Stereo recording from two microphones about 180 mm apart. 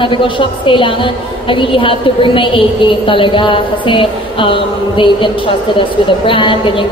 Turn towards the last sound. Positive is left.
turn(degrees=30)  # may be behind; listen again after turning